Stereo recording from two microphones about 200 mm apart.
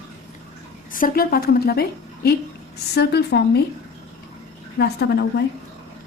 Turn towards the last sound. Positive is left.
turn(degrees=55)  # may be behind; listen again after turning